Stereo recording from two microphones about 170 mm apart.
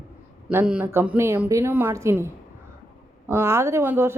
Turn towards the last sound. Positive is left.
turn(degrees=-15)  # may be behind; listen again after turning